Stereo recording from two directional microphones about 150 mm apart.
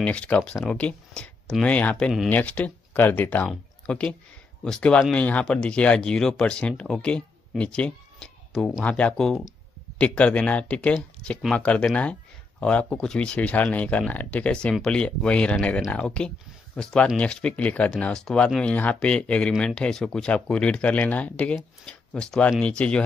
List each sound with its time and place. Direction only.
0.0 s speech: 10° left (ahead or behind)